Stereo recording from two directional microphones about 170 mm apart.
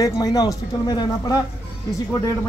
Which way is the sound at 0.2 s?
20° left (ahead or behind).